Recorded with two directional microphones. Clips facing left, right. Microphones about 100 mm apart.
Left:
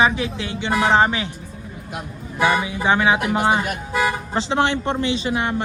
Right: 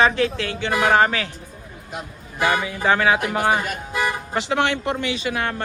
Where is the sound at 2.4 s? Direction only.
20° left (ahead or behind).